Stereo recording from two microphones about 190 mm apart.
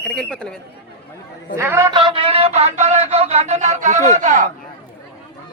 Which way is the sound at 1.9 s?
25° right (ahead or behind).